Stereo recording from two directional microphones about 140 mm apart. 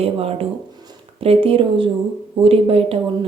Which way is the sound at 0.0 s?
45° right (ahead or behind).